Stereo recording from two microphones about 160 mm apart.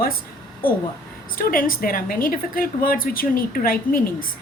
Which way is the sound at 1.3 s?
60° left (ahead or behind).